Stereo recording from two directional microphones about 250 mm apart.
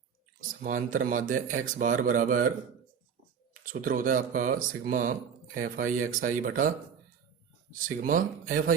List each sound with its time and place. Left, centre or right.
0.6 s speech: right
3.6 s speech: right